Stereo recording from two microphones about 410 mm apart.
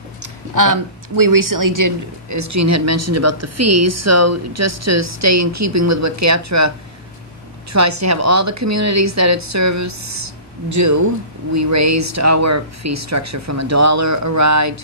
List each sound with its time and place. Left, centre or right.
0.2 s speech: right
7.7 s speech: right